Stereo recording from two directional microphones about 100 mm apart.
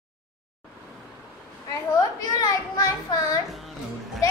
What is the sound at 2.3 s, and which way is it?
A child's voice, 40° left (ahead or behind).